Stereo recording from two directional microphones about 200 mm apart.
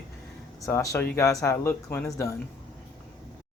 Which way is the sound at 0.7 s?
15° left (ahead or behind).